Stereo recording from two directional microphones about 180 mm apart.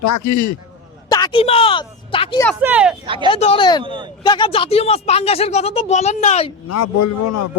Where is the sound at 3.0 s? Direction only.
30° right (ahead or behind).